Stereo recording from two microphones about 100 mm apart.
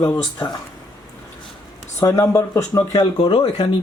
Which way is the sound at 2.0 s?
30° left (ahead or behind).